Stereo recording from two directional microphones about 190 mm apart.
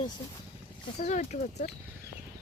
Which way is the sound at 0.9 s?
35° left (ahead or behind).